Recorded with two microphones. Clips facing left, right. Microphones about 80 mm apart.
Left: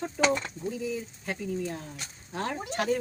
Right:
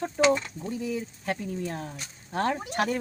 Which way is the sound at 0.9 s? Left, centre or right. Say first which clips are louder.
Right 3 dB; right.